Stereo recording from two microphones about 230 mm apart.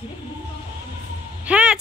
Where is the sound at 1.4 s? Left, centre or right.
Centre.